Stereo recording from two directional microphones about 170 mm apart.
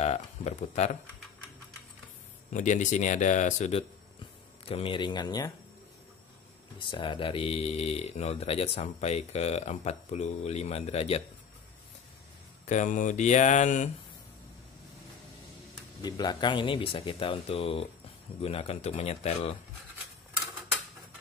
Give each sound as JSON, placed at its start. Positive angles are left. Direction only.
{"t": 0.0, "sound": "speech", "side_deg": 40}
{"t": 2.5, "sound": "speech", "side_deg": 45}
{"t": 6.8, "sound": "speech", "side_deg": 30}
{"t": 12.6, "sound": "speech", "side_deg": 45}
{"t": 16.0, "sound": "speech", "side_deg": 25}